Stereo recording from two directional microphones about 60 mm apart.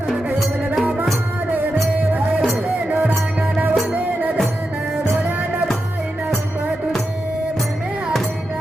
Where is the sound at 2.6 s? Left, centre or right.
Right.